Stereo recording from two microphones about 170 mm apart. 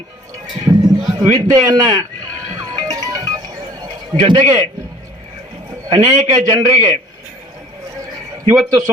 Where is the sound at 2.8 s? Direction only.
20° right (ahead or behind).